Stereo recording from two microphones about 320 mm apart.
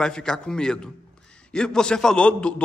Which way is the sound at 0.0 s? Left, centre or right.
Centre.